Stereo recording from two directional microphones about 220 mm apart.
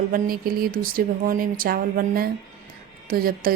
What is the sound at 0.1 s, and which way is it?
Speech, 45° right (ahead or behind).